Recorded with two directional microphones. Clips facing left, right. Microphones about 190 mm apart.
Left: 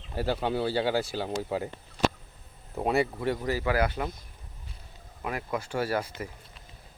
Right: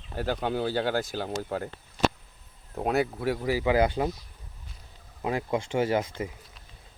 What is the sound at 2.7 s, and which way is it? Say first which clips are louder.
Speech: even; centre (ahead or behind).